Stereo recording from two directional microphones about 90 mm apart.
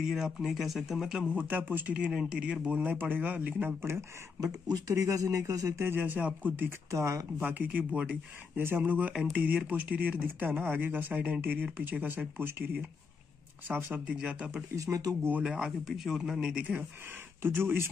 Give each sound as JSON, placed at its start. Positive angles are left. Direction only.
{"t": 0.0, "sound": "speech", "side_deg": 0}
{"t": 3.8, "sound": "speech", "side_deg": -30}
{"t": 4.6, "sound": "speech", "side_deg": -45}
{"t": 6.9, "sound": "speech", "side_deg": -35}
{"t": 7.4, "sound": "speech", "side_deg": -15}
{"t": 14.9, "sound": "speech", "side_deg": -40}
{"t": 15.4, "sound": "speech", "side_deg": -5}
{"t": 17.4, "sound": "speech", "side_deg": -25}